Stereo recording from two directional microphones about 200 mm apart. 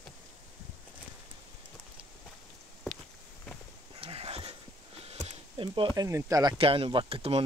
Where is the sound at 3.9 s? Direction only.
30° right (ahead or behind).